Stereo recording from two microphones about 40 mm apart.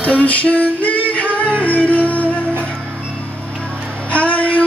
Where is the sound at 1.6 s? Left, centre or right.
Left.